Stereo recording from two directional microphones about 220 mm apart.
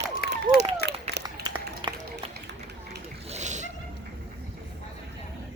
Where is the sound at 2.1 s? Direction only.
50° right (ahead or behind).